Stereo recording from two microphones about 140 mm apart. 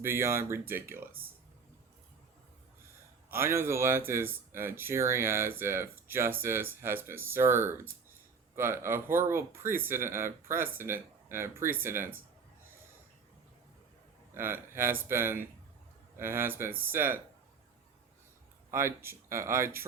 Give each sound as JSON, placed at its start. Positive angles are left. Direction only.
{"t": 0.0, "sound": "speech", "side_deg": -20}
{"t": 3.2, "sound": "speech", "side_deg": -15}
{"t": 14.3, "sound": "speech", "side_deg": -15}
{"t": 18.7, "sound": "speech", "side_deg": -20}